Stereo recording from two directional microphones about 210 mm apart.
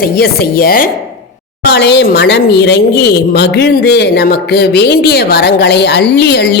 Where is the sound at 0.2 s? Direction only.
45° left (ahead or behind).